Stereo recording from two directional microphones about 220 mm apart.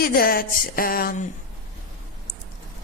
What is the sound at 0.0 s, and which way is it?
Speech, 40° left (ahead or behind).